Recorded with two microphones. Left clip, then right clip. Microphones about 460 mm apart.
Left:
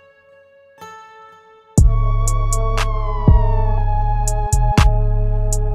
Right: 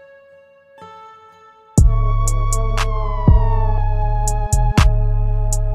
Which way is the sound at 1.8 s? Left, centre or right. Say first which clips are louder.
Even; right.